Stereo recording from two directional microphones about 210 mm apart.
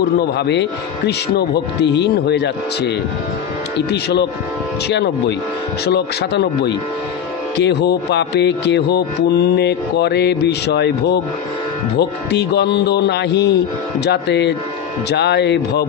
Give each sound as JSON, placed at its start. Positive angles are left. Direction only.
{"t": 0.4, "sound": "speech", "side_deg": 55}